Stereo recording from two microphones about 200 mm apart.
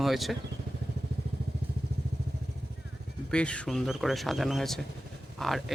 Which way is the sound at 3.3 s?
5° left (ahead or behind).